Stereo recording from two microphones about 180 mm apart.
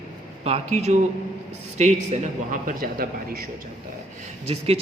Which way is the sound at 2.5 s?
50° right (ahead or behind).